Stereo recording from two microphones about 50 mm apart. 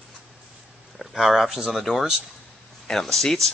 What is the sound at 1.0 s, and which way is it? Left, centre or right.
Speech, centre.